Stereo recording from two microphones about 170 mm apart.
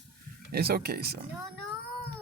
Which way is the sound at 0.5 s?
65° right (ahead or behind).